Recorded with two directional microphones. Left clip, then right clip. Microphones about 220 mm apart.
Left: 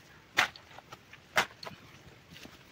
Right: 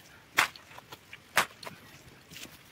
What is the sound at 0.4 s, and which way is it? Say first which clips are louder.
Walk: right 2 dB; 20° right (ahead or behind).